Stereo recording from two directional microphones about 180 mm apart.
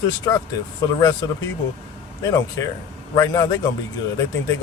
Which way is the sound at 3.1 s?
20° left (ahead or behind).